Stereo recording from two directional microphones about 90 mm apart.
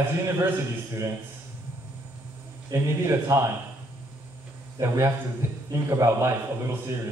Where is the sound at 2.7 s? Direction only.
30° right (ahead or behind).